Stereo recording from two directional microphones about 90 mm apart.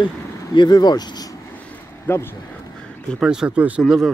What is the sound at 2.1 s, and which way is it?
Speech, 30° left (ahead or behind).